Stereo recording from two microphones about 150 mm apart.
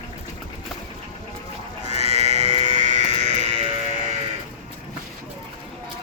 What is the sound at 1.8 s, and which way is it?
Sheep, 45° right (ahead or behind).